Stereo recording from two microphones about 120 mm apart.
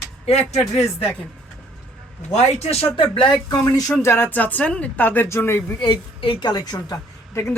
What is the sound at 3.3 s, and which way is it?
Speech, 30° left (ahead or behind).